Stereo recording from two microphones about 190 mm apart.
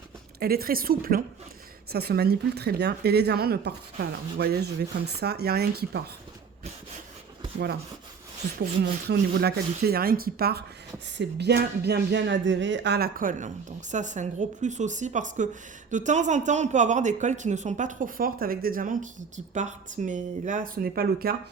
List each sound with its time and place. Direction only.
0.3 s speech: 55° right (ahead or behind)
8.5 s a woman's voice: 60° right (ahead or behind)